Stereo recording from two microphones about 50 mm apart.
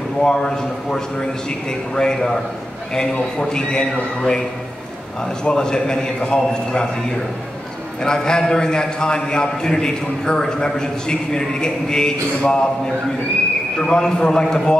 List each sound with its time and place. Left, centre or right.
0.2 s a man's voice: centre
8.0 s a man's voice: centre